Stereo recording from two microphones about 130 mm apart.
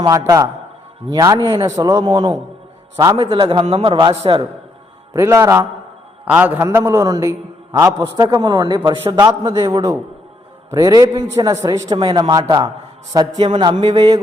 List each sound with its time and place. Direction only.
0.0 s a man's voice: 25° right (ahead or behind)
2.9 s a man's voice: 25° right (ahead or behind)
3.2 s a man's voice: 40° right (ahead or behind)
5.1 s a man's voice: 20° right (ahead or behind)
11.9 s a man's voice: 35° right (ahead or behind)